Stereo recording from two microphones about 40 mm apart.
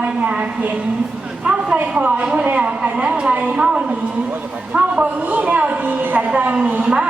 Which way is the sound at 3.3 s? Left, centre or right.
Right.